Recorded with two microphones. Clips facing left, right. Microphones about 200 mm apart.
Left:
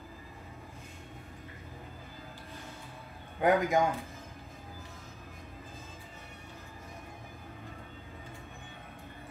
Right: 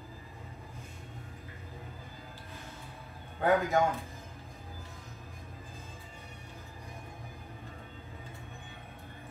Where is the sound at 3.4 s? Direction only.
15° left (ahead or behind).